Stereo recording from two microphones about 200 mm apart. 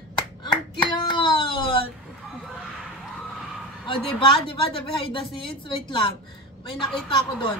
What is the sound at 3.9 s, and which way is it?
A woman's voice, 25° left (ahead or behind).